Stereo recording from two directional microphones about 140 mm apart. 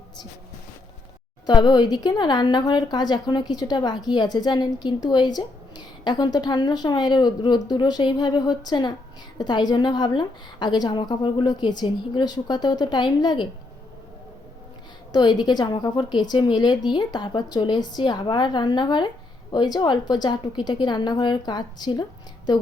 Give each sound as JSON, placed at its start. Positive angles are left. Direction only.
{"t": 1.5, "sound": "a woman's voice", "side_deg": 30}
{"t": 15.1, "sound": "a woman's voice", "side_deg": 30}